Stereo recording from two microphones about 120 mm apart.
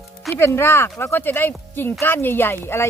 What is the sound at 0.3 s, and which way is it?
Speech, 20° left (ahead or behind).